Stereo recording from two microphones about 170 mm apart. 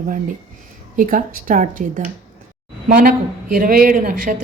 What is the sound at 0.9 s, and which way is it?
Speech, 50° right (ahead or behind).